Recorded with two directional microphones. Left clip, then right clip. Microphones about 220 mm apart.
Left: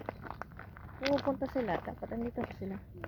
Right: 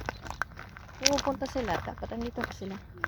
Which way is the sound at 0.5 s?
40° right (ahead or behind).